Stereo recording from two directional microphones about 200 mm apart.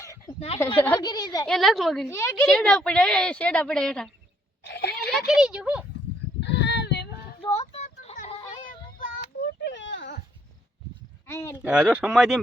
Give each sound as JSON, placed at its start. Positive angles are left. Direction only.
{"t": 0.3, "sound": "a woman's voice", "side_deg": 30}
{"t": 0.8, "sound": "a woman's voice", "side_deg": 10}
{"t": 1.0, "sound": "speech", "side_deg": 20}
{"t": 1.5, "sound": "speech", "side_deg": 0}
{"t": 2.0, "sound": "a woman's voice", "side_deg": 15}
{"t": 2.5, "sound": "speech", "side_deg": 5}
{"t": 4.6, "sound": "a sound", "side_deg": 55}
{"t": 5.1, "sound": "speech", "side_deg": 0}
{"t": 6.4, "sound": "child singing", "side_deg": 60}
{"t": 7.4, "sound": "child singing", "side_deg": 30}
{"t": 9.6, "sound": "a sound", "side_deg": 65}
{"t": 11.3, "sound": "speech", "side_deg": 10}
{"t": 11.5, "sound": "speech", "side_deg": -5}